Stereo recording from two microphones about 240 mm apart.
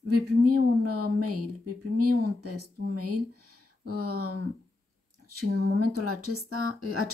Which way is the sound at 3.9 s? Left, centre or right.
Right.